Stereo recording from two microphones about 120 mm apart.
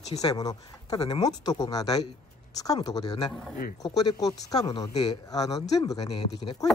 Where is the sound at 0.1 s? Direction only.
30° left (ahead or behind).